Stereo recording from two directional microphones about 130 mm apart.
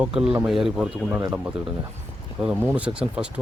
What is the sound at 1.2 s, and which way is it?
Speech, 25° right (ahead or behind).